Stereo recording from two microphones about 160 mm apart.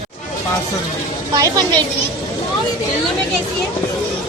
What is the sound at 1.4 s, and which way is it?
Speech, 25° right (ahead or behind).